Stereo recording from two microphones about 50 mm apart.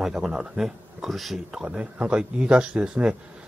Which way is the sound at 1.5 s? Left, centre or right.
Centre.